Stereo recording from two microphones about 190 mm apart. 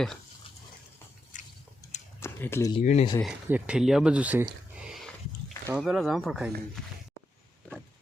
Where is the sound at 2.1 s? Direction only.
15° left (ahead or behind).